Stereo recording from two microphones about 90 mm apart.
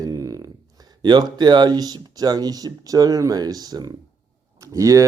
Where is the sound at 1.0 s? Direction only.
55° right (ahead or behind).